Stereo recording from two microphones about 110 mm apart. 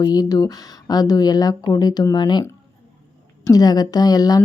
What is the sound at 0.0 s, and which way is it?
Speech, 35° left (ahead or behind).